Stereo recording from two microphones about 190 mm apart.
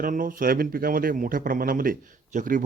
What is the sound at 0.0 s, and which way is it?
A man's voice, 45° right (ahead or behind).